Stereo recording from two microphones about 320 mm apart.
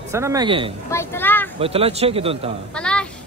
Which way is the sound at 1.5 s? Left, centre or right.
Centre.